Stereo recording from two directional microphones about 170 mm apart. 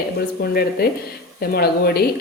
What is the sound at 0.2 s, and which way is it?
A woman's voice, 65° left (ahead or behind).